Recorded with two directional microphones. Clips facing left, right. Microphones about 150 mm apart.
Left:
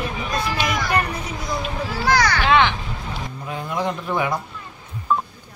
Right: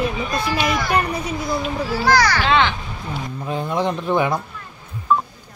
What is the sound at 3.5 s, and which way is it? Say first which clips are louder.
Speech: right 3 dB; 25° right (ahead or behind).